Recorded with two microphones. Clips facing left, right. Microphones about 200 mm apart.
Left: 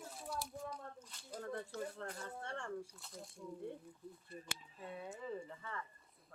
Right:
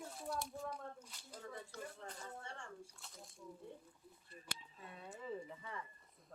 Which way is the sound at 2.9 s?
Centre (ahead or behind).